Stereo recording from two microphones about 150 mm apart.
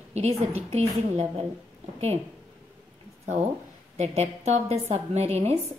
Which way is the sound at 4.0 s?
45° right (ahead or behind).